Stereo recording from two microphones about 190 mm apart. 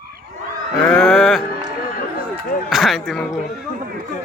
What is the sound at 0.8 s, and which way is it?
Speech, 5° left (ahead or behind).